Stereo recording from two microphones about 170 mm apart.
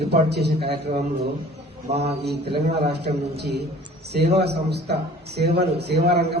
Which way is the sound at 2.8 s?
75° right (ahead or behind).